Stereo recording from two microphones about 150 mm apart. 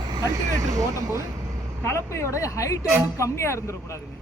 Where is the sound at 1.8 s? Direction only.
15° left (ahead or behind).